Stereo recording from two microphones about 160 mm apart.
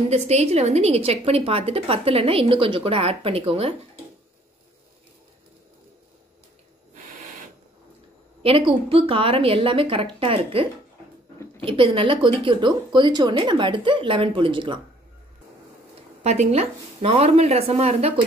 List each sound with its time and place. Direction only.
0.1 s a woman's voice: 40° right (ahead or behind)
8.4 s a woman's voice: 35° right (ahead or behind)
16.2 s a woman's voice: 40° right (ahead or behind)